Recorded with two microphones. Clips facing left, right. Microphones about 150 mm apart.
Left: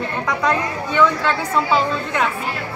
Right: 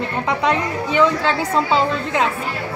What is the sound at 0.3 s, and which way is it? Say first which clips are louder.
A woman's voice: right 1 dB; 25° right (ahead or behind).